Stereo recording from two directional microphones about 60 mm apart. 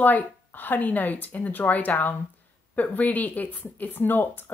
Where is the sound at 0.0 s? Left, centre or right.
Left.